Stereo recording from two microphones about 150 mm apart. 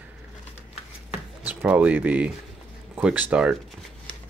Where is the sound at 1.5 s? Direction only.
10° right (ahead or behind).